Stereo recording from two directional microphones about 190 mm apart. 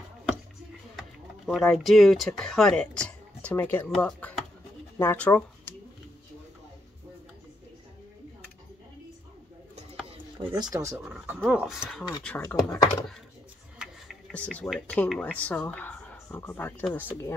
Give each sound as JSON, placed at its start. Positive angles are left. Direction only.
{"t": 0.9, "sound": "speech", "side_deg": 0}
{"t": 10.0, "sound": "a sound", "side_deg": -25}
{"t": 11.1, "sound": "speech", "side_deg": -10}
{"t": 12.4, "sound": "speech", "side_deg": 15}
{"t": 13.7, "sound": "a sound", "side_deg": 0}
{"t": 14.7, "sound": "speech", "side_deg": 0}